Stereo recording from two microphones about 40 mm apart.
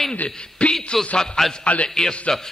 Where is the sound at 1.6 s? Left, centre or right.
Left.